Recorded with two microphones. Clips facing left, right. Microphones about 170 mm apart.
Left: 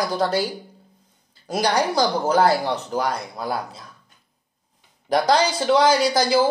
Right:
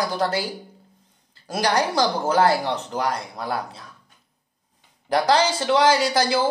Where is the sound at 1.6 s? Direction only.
10° left (ahead or behind).